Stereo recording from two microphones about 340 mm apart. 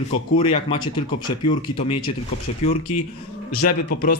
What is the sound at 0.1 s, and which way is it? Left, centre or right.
A man's voice, centre.